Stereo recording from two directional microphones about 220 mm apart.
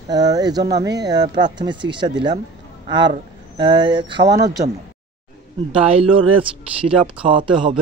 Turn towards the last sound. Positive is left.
turn(degrees=-20)  # may be behind; listen again after turning